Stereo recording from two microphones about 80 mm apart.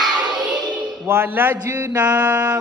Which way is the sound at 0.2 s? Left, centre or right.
Right.